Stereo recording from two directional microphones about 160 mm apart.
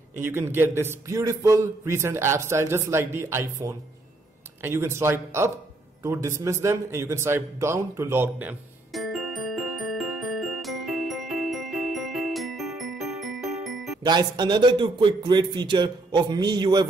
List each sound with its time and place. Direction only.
0.3 s a man's voice: 15° right (ahead or behind)
8.9 s glockenspiel: centre (ahead or behind)
14.0 s a man's voice: 25° right (ahead or behind)